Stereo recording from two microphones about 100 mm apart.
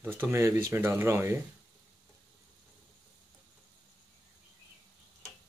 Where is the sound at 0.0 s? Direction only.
20° right (ahead or behind).